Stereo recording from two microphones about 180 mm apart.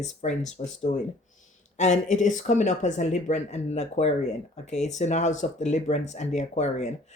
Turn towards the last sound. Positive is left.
turn(degrees=40)  # may be behind; listen again after turning